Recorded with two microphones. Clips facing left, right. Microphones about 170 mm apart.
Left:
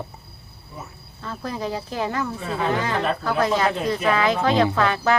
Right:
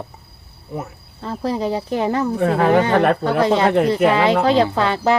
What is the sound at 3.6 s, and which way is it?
Speech, 65° right (ahead or behind).